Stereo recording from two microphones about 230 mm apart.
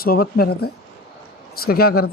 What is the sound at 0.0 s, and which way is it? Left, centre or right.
A man's voice, left.